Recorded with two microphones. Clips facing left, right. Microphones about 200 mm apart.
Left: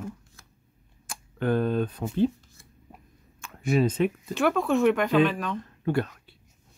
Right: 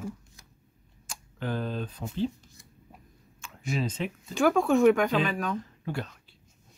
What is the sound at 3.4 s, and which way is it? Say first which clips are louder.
Speech: left 8 dB; 55° left (ahead or behind).